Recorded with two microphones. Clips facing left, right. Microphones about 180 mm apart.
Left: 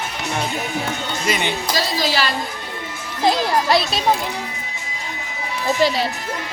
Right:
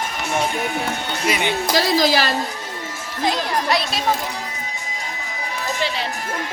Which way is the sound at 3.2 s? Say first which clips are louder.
Left 4 dB; 35° left (ahead or behind).